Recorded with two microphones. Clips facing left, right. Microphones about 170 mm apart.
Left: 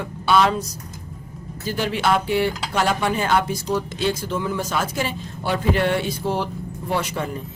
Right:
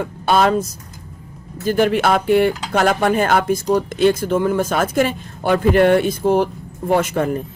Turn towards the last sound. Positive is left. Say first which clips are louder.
# right 7 dB
turn(degrees=-50)  # may be behind; listen again after turning